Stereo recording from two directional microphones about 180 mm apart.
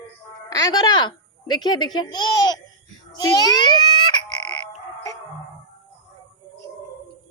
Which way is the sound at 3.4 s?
25° left (ahead or behind).